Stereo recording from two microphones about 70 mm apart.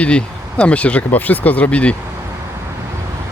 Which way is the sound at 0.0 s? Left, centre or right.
Centre.